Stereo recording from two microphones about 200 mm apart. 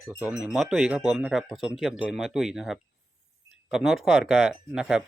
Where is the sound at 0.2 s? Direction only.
5° right (ahead or behind).